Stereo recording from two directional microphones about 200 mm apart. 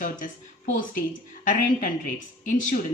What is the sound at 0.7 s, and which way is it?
A woman's voice, 40° left (ahead or behind).